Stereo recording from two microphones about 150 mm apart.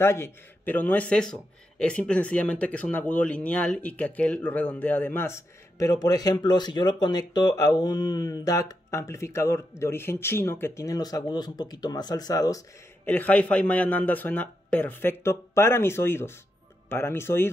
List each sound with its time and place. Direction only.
0.0 s speech: 15° left (ahead or behind)
13.0 s speech: 10° left (ahead or behind)